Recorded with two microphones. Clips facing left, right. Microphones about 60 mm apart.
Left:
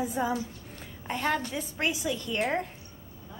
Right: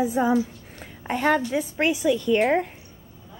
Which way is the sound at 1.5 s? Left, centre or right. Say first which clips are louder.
Right 8 dB; right.